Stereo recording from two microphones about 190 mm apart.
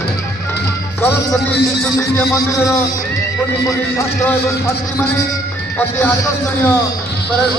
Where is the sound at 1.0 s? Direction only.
10° left (ahead or behind).